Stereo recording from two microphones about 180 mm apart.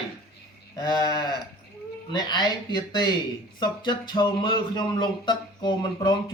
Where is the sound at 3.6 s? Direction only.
25° left (ahead or behind).